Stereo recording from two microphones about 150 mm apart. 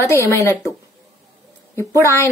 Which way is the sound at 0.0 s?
20° left (ahead or behind).